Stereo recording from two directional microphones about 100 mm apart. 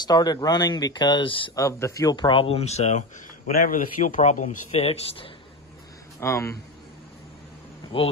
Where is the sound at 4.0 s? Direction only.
90° left; by 5.3 s 70° left (ahead or behind).